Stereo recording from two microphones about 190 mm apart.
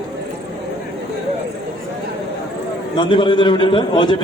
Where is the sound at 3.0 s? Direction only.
25° left (ahead or behind).